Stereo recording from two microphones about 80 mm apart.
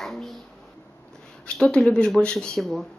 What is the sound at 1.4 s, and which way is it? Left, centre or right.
Speech, centre.